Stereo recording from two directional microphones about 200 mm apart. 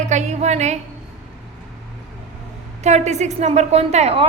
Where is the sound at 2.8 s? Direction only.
35° right (ahead or behind).